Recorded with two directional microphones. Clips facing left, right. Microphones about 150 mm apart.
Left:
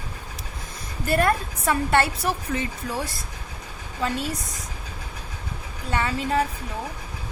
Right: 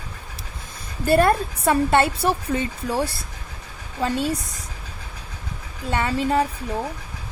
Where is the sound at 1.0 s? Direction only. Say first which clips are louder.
Right 5 dB; 30° right (ahead or behind).